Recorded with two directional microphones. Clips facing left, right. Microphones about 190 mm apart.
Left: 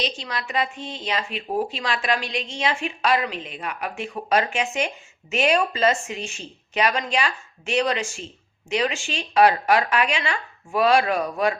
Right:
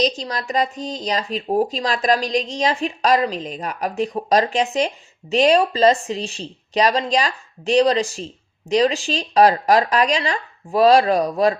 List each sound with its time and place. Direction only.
0.0 s speech: 40° right (ahead or behind)